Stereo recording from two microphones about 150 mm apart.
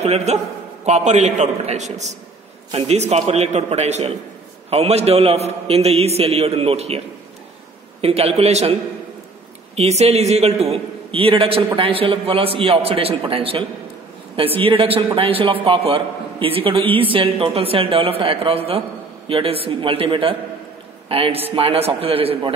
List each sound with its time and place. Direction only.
0.0 s a man's voice: 45° right (ahead or behind)
8.0 s a man's voice: 40° right (ahead or behind)
9.8 s a man's voice: 45° right (ahead or behind)